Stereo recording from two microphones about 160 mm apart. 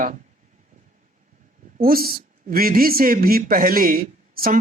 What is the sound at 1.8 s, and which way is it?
A woman's voice, 70° right (ahead or behind).